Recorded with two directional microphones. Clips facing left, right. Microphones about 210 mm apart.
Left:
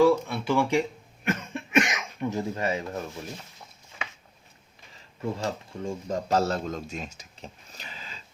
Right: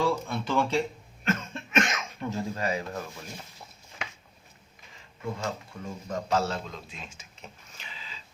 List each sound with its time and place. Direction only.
0.0 s speech: 10° left (ahead or behind)
5.2 s a man's voice: 30° left (ahead or behind)